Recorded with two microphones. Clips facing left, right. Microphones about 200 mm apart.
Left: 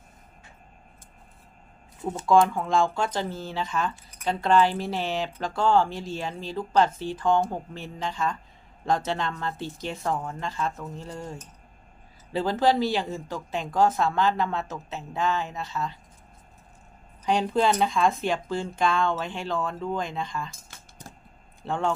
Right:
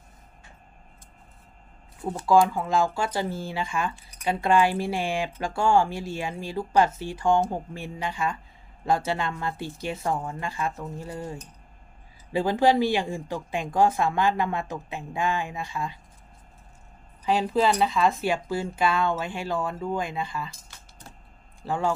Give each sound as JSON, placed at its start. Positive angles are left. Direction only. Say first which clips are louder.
{"t": 2.0, "sound": "speech", "louder": "even", "side_deg": 0}
{"t": 17.2, "sound": "speech", "louder": "even", "side_deg": -5}
{"t": 21.6, "sound": "speech", "louder": "right 1 dB", "side_deg": -5}